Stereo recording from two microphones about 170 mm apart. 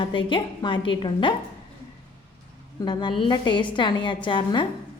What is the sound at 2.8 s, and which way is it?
A woman's voice, 25° left (ahead or behind).